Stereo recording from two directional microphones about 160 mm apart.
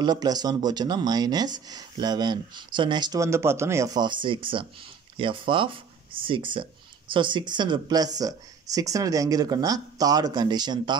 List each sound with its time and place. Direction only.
0.0 s speech: 25° right (ahead or behind)